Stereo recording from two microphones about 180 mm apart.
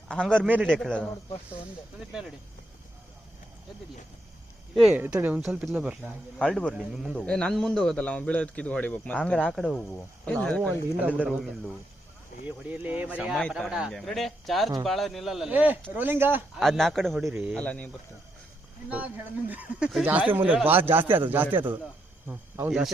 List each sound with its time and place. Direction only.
0.1 s a man's voice: 5° left (ahead or behind)
0.4 s speech: 10° right (ahead or behind)
0.7 s a man's voice: 5° left (ahead or behind)
4.7 s a man's voice: centre (ahead or behind)
6.4 s a man's voice: 5° left (ahead or behind)
10.6 s speech: 10° right (ahead or behind)
12.5 s a man's voice: 10° right (ahead or behind)
16.6 s a man's voice: centre (ahead or behind)
18.9 s speech: 10° right (ahead or behind)